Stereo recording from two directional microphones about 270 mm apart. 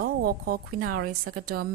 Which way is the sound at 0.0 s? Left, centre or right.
Right.